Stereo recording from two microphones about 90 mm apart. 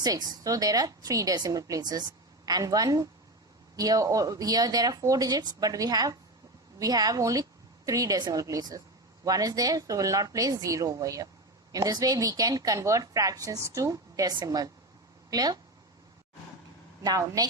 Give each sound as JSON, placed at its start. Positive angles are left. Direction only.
{"t": 0.0, "sound": "a woman's voice", "side_deg": -45}
{"t": 17.0, "sound": "speech", "side_deg": -40}